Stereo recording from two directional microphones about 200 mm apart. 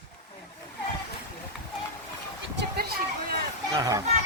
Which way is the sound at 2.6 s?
50° right (ahead or behind).